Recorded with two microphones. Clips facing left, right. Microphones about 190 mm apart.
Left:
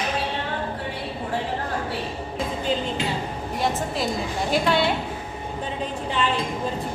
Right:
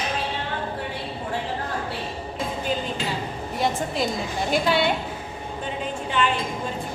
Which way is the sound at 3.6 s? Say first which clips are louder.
Right 1 dB; centre (ahead or behind).